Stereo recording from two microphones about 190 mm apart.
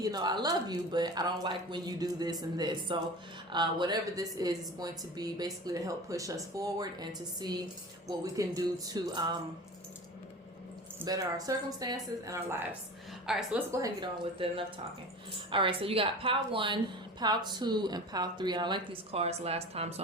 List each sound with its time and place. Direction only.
0.0 s a woman's voice: 20° right (ahead or behind)
11.0 s speech: 20° right (ahead or behind)
13.2 s a woman's voice: centre (ahead or behind)
13.7 s a woman's voice: 15° right (ahead or behind); by 20.0 s 30° right (ahead or behind)